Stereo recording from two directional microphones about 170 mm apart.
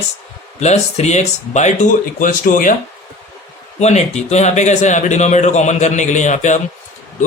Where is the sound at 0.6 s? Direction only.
40° left (ahead or behind).